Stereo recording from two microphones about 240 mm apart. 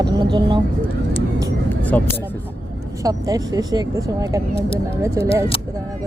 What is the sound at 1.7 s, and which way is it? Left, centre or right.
Vehicle, centre.